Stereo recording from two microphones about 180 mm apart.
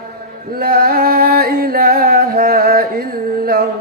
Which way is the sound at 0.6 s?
55° right (ahead or behind).